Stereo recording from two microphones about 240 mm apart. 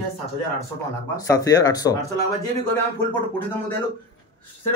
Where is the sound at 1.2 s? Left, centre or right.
Centre.